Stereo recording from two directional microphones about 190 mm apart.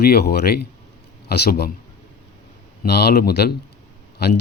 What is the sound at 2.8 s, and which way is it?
Speech, 55° left (ahead or behind).